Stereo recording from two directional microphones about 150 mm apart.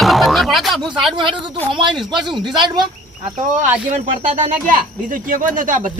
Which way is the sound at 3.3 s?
60° right (ahead or behind).